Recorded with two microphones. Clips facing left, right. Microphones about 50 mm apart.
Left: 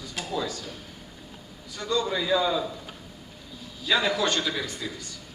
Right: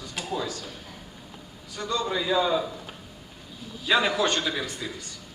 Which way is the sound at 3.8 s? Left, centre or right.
Right.